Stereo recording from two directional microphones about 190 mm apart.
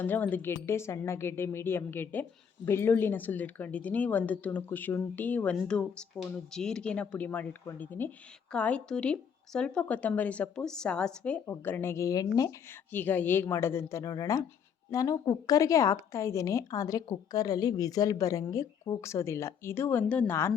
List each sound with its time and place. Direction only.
0.0 s speech: 10° left (ahead or behind)